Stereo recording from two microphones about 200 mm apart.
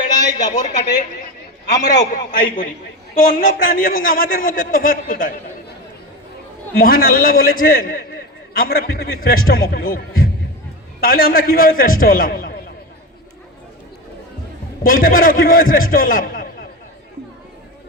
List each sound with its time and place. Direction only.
0.1 s a sound: 20° left (ahead or behind)
0.5 s a woman's voice: 40° left (ahead or behind)
2.4 s a man's voice: 40° left (ahead or behind)
6.7 s a man's voice: 45° left (ahead or behind)
14.8 s a man's voice: 45° left (ahead or behind)